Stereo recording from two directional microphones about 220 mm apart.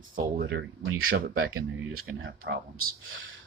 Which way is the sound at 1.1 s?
50° right (ahead or behind).